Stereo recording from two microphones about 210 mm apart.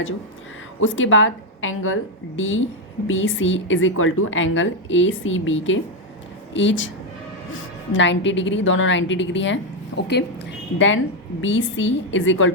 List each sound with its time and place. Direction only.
0.8 s a woman's voice: 65° left (ahead or behind)
7.9 s a woman's voice: 60° left (ahead or behind)